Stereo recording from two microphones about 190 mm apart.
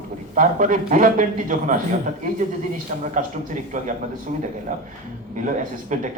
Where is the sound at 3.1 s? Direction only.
40° right (ahead or behind).